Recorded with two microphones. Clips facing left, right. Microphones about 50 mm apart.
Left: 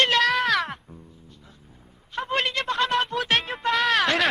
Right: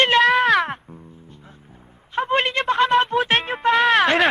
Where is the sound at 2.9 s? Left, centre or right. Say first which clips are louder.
Right 6 dB; right.